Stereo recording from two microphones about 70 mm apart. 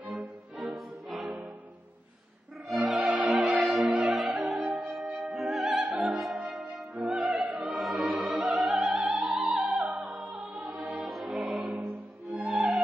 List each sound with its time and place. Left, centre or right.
0.1 s music: centre
2.7 s music: centre
11.7 s music: right
12.3 s music: centre